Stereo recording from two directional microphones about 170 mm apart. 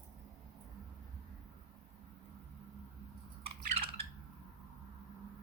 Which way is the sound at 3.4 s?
35° right (ahead or behind).